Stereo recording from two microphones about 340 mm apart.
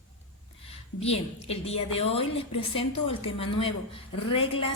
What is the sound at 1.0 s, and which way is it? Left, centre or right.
A woman's voice, centre.